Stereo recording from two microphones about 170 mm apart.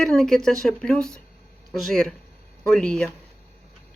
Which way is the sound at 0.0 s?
Centre (ahead or behind).